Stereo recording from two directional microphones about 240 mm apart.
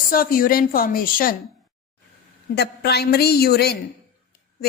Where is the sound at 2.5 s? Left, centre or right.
Left.